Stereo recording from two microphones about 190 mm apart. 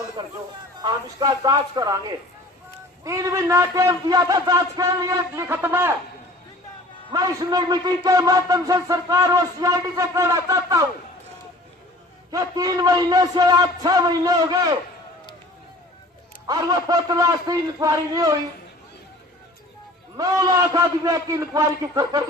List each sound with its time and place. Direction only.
0.2 s a man's voice: 20° right (ahead or behind)
7.1 s a man's voice: 20° right (ahead or behind)
12.3 s a man's voice: 20° right (ahead or behind)
16.5 s a man's voice: 20° right (ahead or behind)
20.1 s a man's voice: 20° right (ahead or behind)